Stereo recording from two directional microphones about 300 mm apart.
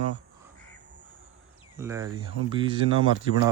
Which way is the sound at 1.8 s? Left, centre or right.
Centre.